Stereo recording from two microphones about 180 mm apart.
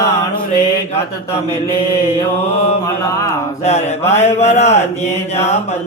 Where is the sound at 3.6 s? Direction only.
35° left (ahead or behind).